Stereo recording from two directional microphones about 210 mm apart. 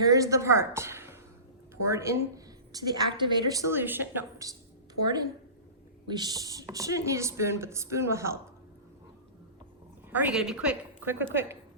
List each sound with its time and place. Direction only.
0.1 s a woman's voice: 15° right (ahead or behind)
6.1 s a woman's voice: 20° right (ahead or behind)
10.1 s a woman's voice: 10° right (ahead or behind)